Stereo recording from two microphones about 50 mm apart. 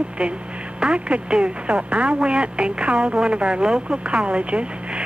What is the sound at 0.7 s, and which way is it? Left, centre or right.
A woman's voice, right.